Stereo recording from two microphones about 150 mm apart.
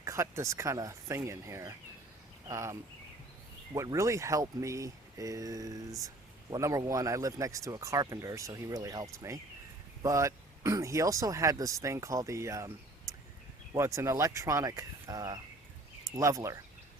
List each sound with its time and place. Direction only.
0.0 s speech: 20° right (ahead or behind)
3.8 s speech: 20° right (ahead or behind)